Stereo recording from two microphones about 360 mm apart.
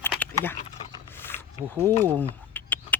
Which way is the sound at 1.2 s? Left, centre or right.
Centre.